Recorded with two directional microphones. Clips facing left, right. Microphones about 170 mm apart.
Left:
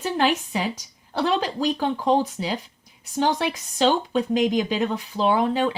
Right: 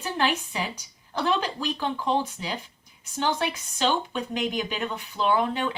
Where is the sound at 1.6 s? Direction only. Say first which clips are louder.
Left 6 dB; 40° left (ahead or behind).